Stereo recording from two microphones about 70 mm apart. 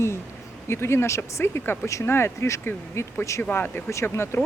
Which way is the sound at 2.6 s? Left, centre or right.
Left.